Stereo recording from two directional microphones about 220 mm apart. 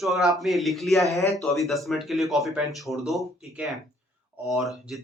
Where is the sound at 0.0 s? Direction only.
Centre (ahead or behind).